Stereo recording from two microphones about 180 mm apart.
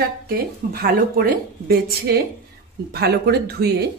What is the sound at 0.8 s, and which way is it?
Speech, 55° right (ahead or behind).